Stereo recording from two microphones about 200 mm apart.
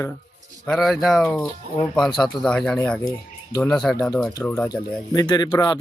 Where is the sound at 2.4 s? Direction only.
5° left (ahead or behind).